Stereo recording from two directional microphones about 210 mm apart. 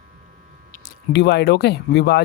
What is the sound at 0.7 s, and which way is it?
Speech, 50° left (ahead or behind).